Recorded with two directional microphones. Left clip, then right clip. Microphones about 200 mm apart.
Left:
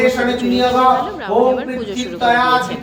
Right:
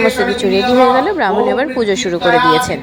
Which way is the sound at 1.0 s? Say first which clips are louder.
Right 2 dB; 35° right (ahead or behind).